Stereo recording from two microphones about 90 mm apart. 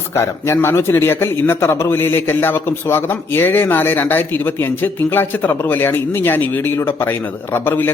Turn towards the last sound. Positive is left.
turn(degrees=25)  # may be behind; listen again after turning